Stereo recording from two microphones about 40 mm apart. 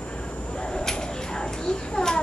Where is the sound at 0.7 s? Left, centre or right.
Centre.